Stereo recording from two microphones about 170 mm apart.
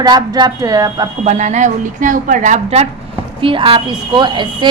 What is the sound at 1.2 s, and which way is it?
Speech, 45° right (ahead or behind).